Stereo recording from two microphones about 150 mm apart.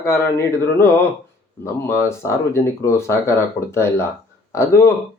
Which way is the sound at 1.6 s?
20° left (ahead or behind).